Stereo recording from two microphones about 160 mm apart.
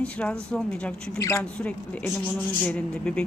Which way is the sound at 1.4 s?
5° left (ahead or behind).